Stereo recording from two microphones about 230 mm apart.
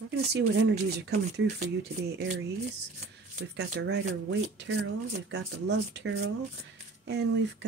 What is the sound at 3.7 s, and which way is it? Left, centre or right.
Speech, right.